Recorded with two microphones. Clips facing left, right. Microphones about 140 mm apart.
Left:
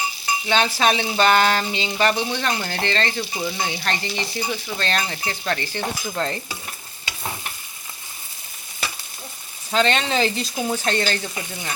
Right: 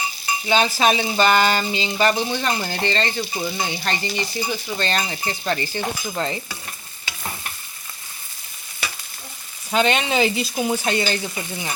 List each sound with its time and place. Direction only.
0.4 s frying: 5° right (ahead or behind)
9.7 s frying: 10° right (ahead or behind)